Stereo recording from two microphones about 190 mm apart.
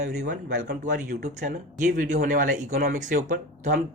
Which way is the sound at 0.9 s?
40° right (ahead or behind).